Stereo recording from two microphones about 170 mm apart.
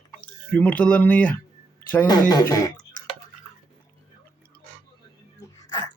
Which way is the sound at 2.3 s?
20° left (ahead or behind).